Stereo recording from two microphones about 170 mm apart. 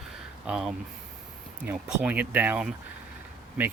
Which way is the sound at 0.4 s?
5° right (ahead or behind).